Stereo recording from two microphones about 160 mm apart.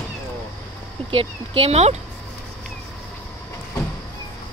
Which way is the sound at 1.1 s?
35° right (ahead or behind).